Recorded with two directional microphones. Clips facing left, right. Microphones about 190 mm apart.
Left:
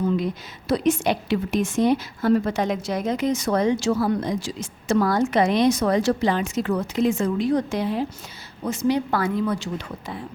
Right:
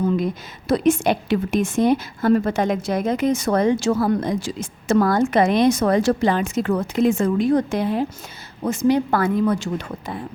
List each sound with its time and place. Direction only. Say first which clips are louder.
0.7 s a woman's voice: right 3 dB; 50° right (ahead or behind)